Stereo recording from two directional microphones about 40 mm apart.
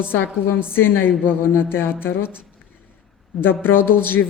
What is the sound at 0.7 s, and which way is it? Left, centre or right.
A woman's voice, left.